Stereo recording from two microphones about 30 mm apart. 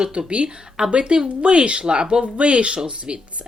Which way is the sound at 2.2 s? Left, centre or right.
Right.